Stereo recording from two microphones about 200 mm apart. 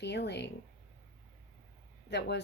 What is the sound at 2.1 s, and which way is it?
Speech, 60° left (ahead or behind).